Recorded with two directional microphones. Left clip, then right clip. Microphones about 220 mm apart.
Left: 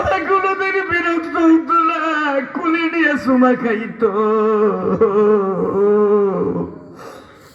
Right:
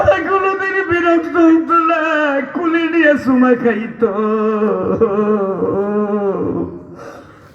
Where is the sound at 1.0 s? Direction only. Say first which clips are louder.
Right 4 dB; 50° left (ahead or behind).